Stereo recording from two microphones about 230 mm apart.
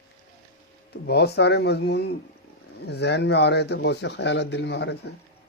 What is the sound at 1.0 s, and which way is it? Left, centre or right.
A man's voice, left.